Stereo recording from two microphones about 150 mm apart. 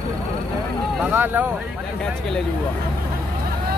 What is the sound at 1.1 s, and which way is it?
Speech, 10° right (ahead or behind).